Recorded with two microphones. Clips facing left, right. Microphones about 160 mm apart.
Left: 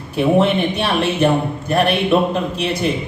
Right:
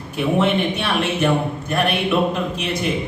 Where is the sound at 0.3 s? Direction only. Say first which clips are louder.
Left 1 dB; 35° left (ahead or behind).